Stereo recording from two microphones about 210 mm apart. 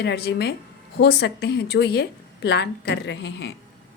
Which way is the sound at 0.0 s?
50° left (ahead or behind).